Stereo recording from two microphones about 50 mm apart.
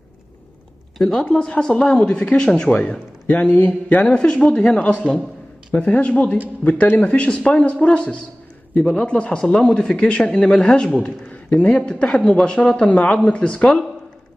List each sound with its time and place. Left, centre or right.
1.0 s speech: left
1.3 s speech: centre; by 4.0 s left
4.0 s speech: left
9.9 s speech: left
10.5 s speech: centre
11.5 s speech: left